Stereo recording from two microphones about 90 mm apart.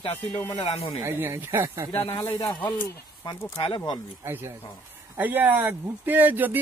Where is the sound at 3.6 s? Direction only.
70° left (ahead or behind).